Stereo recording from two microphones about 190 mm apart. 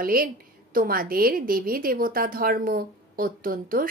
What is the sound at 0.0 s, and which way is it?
A woman's voice, 50° right (ahead or behind).